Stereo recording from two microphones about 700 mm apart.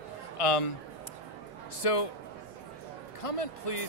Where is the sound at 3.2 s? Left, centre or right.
Left.